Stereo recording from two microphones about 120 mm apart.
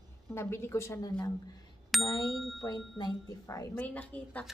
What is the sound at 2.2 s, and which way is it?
Ding, centre (ahead or behind).